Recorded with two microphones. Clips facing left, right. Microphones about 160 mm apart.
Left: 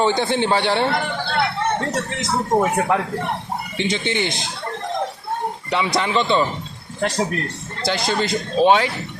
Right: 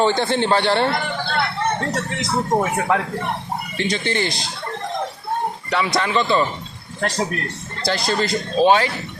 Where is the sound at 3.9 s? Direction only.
20° left (ahead or behind).